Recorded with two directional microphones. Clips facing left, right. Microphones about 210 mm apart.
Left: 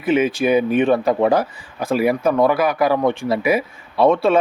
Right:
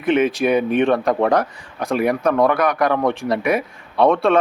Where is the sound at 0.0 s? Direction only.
5° left (ahead or behind).